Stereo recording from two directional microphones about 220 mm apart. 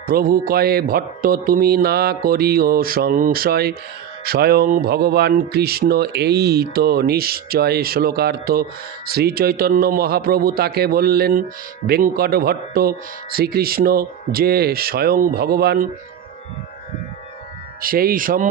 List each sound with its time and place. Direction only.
0.1 s speech: 40° right (ahead or behind)
17.8 s speech: 40° right (ahead or behind)